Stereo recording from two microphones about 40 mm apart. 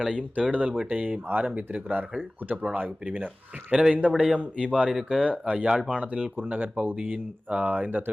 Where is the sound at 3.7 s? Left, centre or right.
Right.